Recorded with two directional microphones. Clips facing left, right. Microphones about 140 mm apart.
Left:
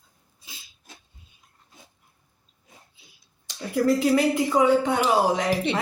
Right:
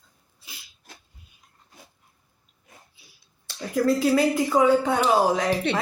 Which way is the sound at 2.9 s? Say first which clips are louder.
Even; 20° left (ahead or behind).